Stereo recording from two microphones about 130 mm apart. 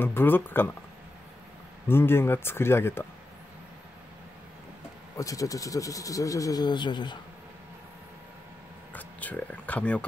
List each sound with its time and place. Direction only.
0.0 s speech: 15° left (ahead or behind)
1.9 s speech: 15° left (ahead or behind)
5.1 s speech: 25° left (ahead or behind)
8.9 s speech: 10° left (ahead or behind)